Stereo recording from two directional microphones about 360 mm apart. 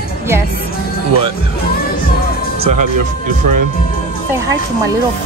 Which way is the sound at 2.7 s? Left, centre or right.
Right.